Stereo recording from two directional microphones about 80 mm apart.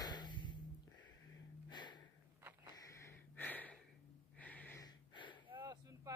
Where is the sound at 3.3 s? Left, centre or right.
Left.